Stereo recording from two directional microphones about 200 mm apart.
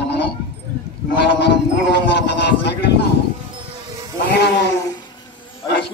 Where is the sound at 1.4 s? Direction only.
55° left (ahead or behind).